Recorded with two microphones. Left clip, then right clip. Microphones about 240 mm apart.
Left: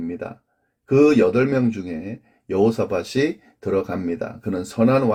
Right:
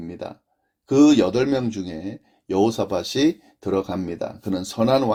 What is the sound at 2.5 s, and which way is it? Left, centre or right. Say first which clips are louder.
Speech: left 1 dB; right.